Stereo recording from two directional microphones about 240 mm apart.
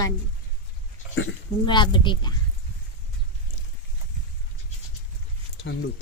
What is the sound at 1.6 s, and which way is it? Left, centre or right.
Speech, centre.